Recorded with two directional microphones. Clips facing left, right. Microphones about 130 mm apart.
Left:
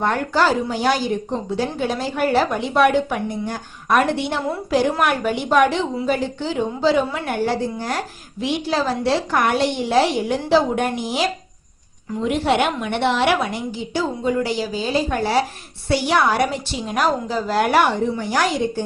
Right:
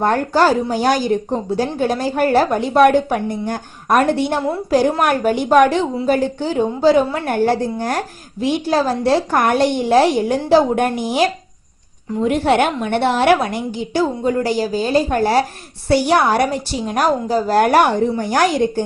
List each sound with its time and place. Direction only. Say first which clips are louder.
0.0 s speech: right 4 dB; 40° right (ahead or behind)